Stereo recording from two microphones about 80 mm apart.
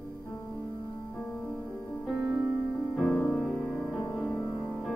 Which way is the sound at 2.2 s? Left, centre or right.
Right.